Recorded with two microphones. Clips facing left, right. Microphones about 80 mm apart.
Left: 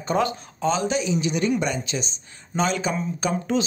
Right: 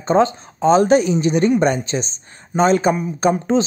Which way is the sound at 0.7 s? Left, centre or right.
Right.